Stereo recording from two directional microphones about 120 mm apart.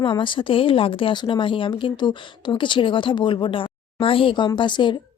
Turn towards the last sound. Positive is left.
turn(degrees=40)  # may be behind; listen again after turning